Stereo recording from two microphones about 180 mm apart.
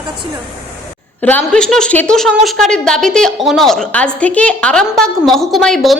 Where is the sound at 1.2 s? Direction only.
5° left (ahead or behind).